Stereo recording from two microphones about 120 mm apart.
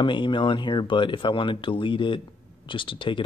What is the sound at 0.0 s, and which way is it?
Speech, 40° left (ahead or behind).